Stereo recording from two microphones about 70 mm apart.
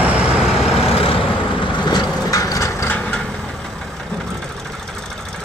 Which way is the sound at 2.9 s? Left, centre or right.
Centre.